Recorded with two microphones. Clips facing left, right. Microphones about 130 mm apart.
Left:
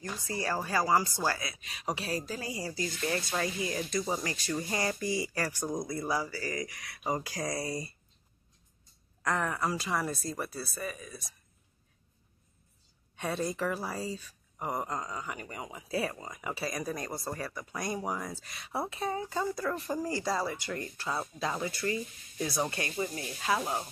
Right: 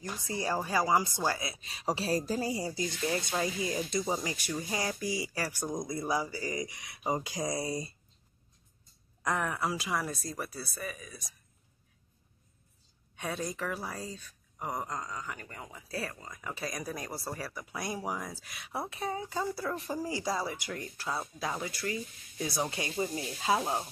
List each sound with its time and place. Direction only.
0.0 s speech: 15° right (ahead or behind)
4.0 s a woman's voice: 5° right (ahead or behind)
5.9 s speech: 15° right (ahead or behind)
9.2 s a woman's voice: 10° right (ahead or behind)
13.1 s a woman's voice: centre (ahead or behind); by 23.8 s 25° right (ahead or behind)